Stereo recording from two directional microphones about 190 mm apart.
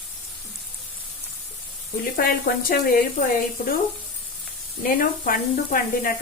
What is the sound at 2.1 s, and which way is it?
Speech, 50° left (ahead or behind).